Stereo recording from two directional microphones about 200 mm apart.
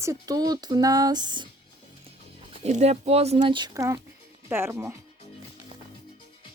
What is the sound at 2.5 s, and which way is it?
Speech, 35° right (ahead or behind).